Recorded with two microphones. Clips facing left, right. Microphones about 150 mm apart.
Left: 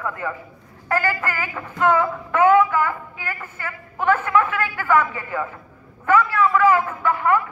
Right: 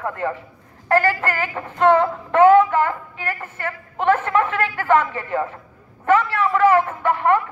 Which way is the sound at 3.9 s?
25° right (ahead or behind).